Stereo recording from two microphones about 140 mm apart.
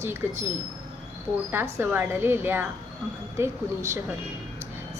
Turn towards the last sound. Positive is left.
turn(degrees=-20)  # may be behind; listen again after turning